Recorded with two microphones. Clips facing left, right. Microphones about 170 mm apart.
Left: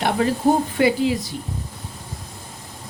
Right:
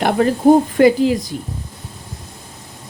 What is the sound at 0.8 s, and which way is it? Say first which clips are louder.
Speech: right 6 dB; 45° right (ahead or behind).